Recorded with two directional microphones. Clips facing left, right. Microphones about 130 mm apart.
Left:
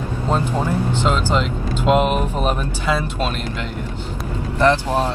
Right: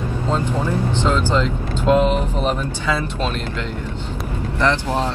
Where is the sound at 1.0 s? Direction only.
20° left (ahead or behind).